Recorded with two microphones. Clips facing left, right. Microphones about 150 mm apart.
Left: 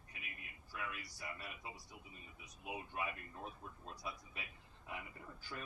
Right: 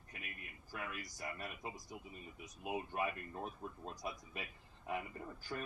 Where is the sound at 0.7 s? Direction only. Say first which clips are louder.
Right 2 dB; 45° right (ahead or behind).